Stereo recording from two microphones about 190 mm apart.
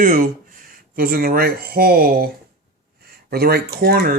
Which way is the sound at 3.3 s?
55° right (ahead or behind).